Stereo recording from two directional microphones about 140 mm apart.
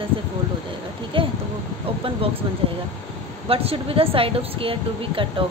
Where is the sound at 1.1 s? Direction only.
40° right (ahead or behind).